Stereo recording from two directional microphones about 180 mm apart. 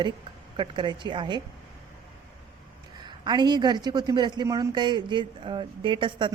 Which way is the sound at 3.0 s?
25° right (ahead or behind).